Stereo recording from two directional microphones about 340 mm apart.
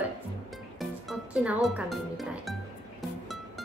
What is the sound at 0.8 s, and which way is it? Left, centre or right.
Music, centre.